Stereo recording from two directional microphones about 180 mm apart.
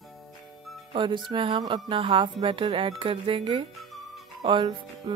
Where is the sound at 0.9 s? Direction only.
25° right (ahead or behind).